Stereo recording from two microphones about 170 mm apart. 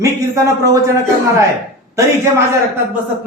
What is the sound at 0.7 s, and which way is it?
Speech, 20° right (ahead or behind).